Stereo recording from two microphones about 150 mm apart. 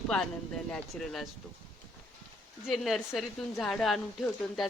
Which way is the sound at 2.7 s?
Centre (ahead or behind).